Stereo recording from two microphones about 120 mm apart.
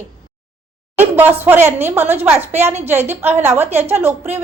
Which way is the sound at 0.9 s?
15° right (ahead or behind).